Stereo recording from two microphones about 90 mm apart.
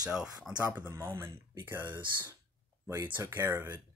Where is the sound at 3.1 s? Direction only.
25° right (ahead or behind).